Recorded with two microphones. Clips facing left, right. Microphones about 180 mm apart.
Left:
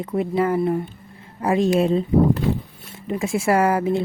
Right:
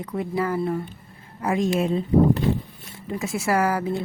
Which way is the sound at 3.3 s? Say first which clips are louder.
Left 4 dB; 25° left (ahead or behind).